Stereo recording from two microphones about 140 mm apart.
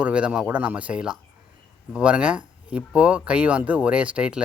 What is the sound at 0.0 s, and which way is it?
Speech, 10° right (ahead or behind).